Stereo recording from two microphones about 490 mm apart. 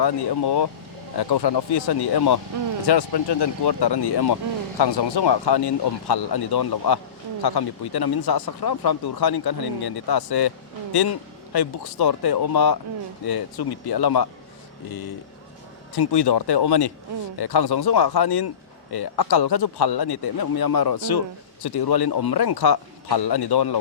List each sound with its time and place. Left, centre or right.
0.0 s a man's voice: left
16.0 s a man's voice: left